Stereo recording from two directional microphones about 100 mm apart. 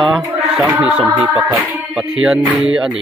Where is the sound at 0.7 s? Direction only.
15° right (ahead or behind).